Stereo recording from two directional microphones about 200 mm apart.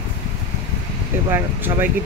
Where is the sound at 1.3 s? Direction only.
10° right (ahead or behind).